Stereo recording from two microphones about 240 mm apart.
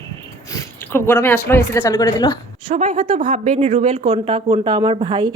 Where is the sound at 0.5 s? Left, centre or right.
Centre.